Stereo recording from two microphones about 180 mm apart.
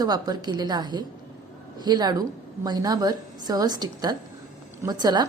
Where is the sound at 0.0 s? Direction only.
20° right (ahead or behind).